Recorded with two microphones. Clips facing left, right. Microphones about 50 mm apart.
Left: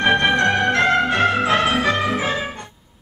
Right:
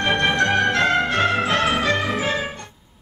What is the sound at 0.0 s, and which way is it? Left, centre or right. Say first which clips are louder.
Music: left 3 dB; centre.